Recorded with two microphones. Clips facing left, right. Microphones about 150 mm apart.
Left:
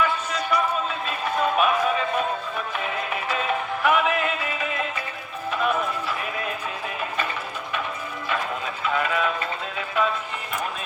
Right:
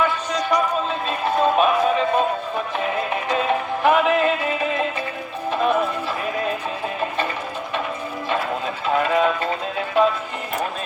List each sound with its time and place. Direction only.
0.0 s music: 35° right (ahead or behind)
8.3 s music: 35° right (ahead or behind)